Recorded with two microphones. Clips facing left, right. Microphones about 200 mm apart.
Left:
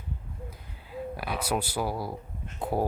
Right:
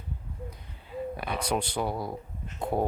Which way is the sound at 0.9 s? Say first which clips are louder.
Right 1 dB; 5° left (ahead or behind).